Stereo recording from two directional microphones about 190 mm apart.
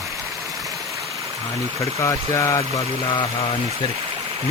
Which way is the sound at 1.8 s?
15° left (ahead or behind).